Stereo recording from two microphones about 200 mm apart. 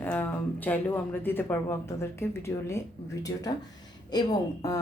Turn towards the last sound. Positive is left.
turn(degrees=15)  # may be behind; listen again after turning